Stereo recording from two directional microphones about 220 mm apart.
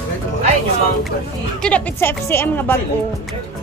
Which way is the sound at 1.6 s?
10° left (ahead or behind).